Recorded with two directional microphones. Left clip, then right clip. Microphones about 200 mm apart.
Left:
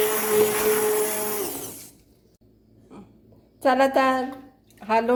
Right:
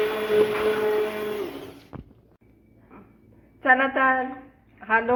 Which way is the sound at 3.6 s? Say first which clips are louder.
Even; 75° left (ahead or behind).